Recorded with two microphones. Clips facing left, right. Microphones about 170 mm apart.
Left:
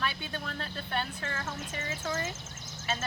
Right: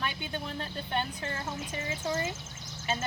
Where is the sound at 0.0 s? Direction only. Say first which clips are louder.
Even; 20° right (ahead or behind).